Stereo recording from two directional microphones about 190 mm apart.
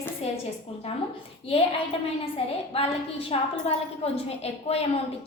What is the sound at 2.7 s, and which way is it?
A child's voice, 30° left (ahead or behind).